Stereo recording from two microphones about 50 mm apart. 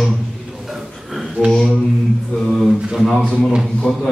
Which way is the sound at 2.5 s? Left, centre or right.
Centre.